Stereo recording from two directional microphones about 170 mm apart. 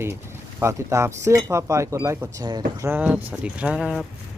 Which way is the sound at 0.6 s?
15° right (ahead or behind).